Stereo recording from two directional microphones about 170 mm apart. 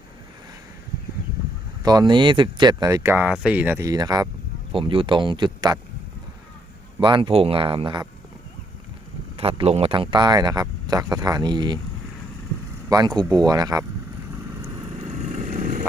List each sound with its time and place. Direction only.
1.8 s speech: 25° right (ahead or behind)
7.0 s speech: 30° right (ahead or behind)
9.4 s speech: 35° right (ahead or behind)
12.9 s speech: 25° right (ahead or behind)
15.0 s vehicle: 45° right (ahead or behind)